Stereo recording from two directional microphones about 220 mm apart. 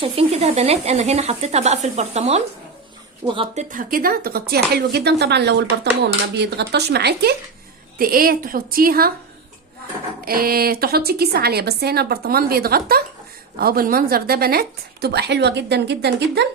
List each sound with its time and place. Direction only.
0.0 s a woman's voice: 25° right (ahead or behind); by 9.1 s 40° right (ahead or behind)
10.2 s a woman's voice: 40° right (ahead or behind)